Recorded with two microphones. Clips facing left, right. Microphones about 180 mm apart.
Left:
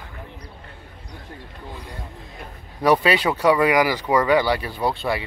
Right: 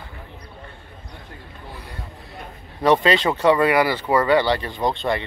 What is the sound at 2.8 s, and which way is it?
Speech, 10° left (ahead or behind).